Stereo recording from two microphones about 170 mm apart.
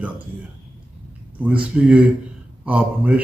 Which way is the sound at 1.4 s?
10° right (ahead or behind).